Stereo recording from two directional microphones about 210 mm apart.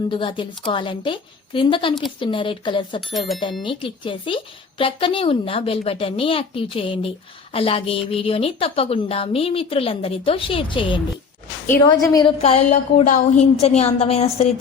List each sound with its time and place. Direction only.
0.1 s a woman's voice: 25° left (ahead or behind)
3.2 s speech: centre (ahead or behind)
3.6 s a woman's voice: 25° left (ahead or behind)